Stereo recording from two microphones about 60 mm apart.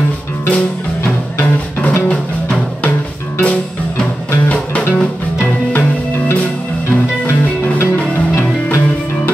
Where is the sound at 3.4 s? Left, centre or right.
Left.